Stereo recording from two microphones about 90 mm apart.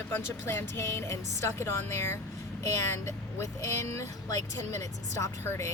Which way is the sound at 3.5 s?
35° left (ahead or behind).